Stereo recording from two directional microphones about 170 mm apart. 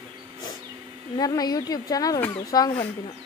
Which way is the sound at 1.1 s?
20° left (ahead or behind).